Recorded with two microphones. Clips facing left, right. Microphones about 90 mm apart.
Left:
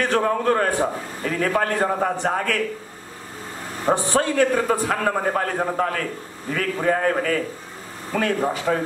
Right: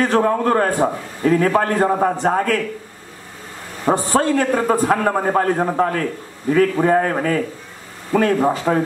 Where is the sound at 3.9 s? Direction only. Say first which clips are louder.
Right 3 dB; 40° right (ahead or behind).